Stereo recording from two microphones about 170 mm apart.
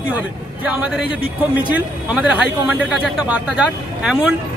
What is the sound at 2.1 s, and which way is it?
A man's voice, 5° right (ahead or behind).